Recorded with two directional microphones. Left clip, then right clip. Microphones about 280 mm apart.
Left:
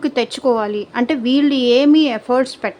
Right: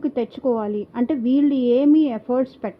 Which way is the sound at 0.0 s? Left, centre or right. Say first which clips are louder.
Left 6 dB; centre.